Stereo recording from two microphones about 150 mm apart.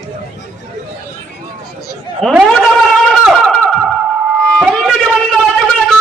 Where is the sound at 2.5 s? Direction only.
Centre (ahead or behind).